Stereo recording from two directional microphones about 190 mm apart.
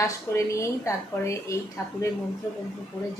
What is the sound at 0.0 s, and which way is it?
A woman's voice, 15° left (ahead or behind).